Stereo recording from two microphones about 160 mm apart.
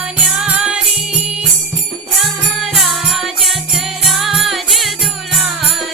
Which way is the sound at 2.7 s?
Centre (ahead or behind).